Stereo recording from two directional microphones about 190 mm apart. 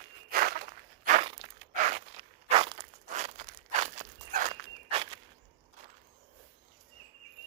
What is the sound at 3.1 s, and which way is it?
Crunch, 40° right (ahead or behind).